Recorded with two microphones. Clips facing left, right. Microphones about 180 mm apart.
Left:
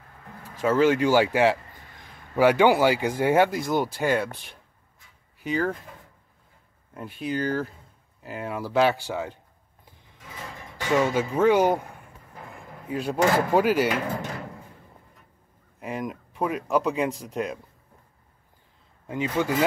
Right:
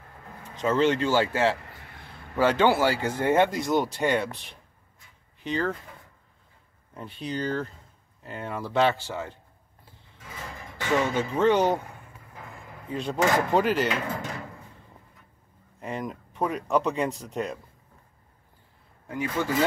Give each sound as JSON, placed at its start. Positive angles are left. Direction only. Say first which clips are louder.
{"t": 0.4, "sound": "speech", "louder": "left 2 dB", "side_deg": 10}
{"t": 6.9, "sound": "speech", "louder": "left 3 dB", "side_deg": 5}
{"t": 11.1, "sound": "speech", "louder": "left 1 dB", "side_deg": 10}
{"t": 15.8, "sound": "speech", "louder": "left 1 dB", "side_deg": 5}
{"t": 19.0, "sound": "speech", "louder": "left 3 dB", "side_deg": 20}